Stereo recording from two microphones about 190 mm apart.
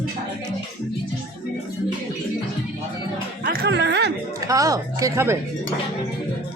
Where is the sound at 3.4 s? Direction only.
55° right (ahead or behind).